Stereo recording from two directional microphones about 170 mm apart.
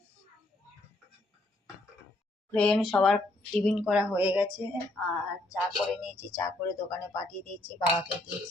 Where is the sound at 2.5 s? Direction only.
5° left (ahead or behind).